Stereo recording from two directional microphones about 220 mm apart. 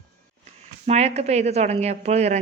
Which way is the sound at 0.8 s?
30° right (ahead or behind).